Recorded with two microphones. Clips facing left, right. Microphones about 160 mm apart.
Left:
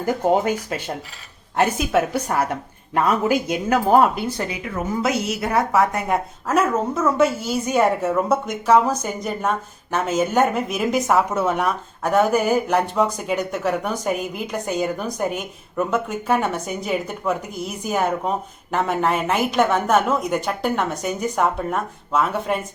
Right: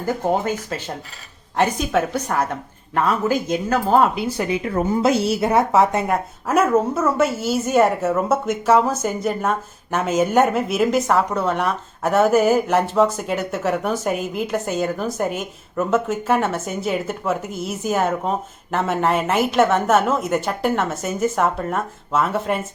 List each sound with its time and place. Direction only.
0.0 s speech: 15° left (ahead or behind)
4.1 s speech: 10° right (ahead or behind)
4.5 s a woman's voice: 30° right (ahead or behind)
6.1 s a woman's voice: 10° right (ahead or behind)